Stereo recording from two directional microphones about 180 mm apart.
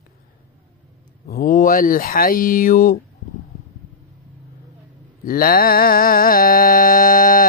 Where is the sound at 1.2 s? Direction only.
50° left (ahead or behind).